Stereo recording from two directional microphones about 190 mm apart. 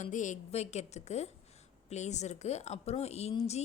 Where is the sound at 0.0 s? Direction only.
40° left (ahead or behind).